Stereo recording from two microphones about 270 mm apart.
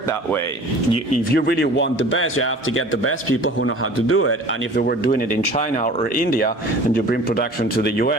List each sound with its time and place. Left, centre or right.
1.3 s a man's voice: left
4.8 s speech: left